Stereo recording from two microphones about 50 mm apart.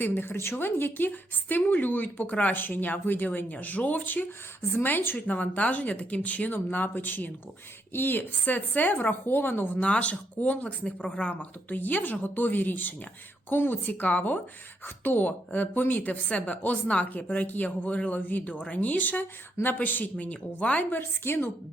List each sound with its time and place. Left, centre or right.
0.6 s a woman's voice: left
9.7 s speech: left
21.0 s a woman's voice: left